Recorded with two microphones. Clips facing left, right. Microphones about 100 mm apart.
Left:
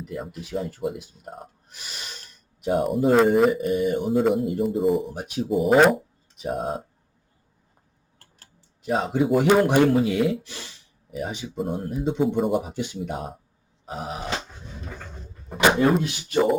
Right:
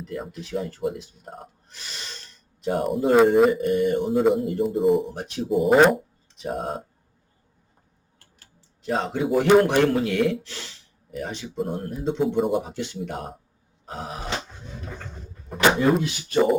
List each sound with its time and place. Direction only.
0.0 s speech: 10° left (ahead or behind)
1.7 s a sound: 15° left (ahead or behind)
2.7 s speech: centre (ahead or behind)
8.8 s speech: 10° left (ahead or behind)
11.4 s speech: centre (ahead or behind)
12.6 s speech: 15° left (ahead or behind)
15.4 s speech: centre (ahead or behind)